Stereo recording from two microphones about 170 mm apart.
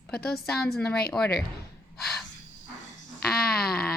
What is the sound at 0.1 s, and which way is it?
Speech, 5° left (ahead or behind).